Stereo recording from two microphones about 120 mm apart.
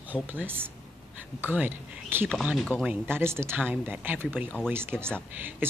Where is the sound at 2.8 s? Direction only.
20° right (ahead or behind).